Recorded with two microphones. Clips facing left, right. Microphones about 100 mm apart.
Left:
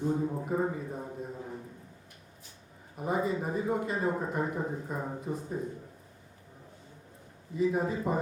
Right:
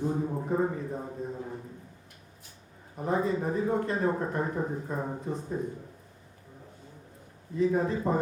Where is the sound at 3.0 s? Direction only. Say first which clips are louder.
Right 2 dB; 5° left (ahead or behind).